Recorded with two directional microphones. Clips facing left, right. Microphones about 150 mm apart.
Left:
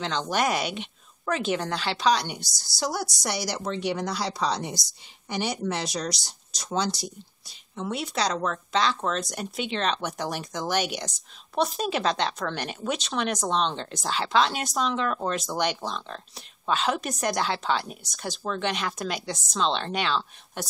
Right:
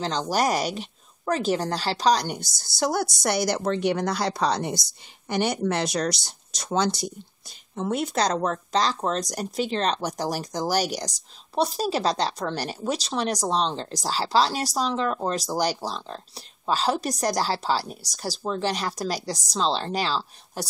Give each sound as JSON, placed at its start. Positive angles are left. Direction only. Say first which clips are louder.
{"t": 0.3, "sound": "speech", "louder": "right 2 dB", "side_deg": -40}
{"t": 2.4, "sound": "speech", "louder": "right 3 dB", "side_deg": 0}
{"t": 2.8, "sound": "a woman's voice", "louder": "right 5 dB", "side_deg": -55}
{"t": 3.3, "sound": "speech", "louder": "right 7 dB", "side_deg": 0}
{"t": 4.3, "sound": "a woman's voice", "louder": "right 2 dB", "side_deg": -50}
{"t": 4.6, "sound": "speech", "louder": "right 5 dB", "side_deg": 0}
{"t": 7.7, "sound": "a woman's voice", "louder": "right 4 dB", "side_deg": -45}